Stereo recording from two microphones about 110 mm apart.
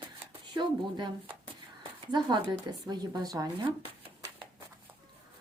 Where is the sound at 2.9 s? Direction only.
35° right (ahead or behind).